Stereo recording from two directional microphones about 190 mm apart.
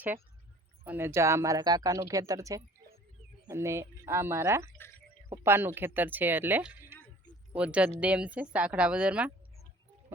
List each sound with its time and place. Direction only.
0.9 s speech: 10° right (ahead or behind)